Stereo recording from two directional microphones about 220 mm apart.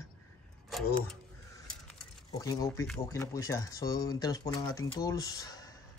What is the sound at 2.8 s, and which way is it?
Speech, 5° left (ahead or behind).